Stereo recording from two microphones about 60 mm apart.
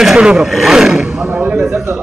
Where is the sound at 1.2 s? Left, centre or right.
Right.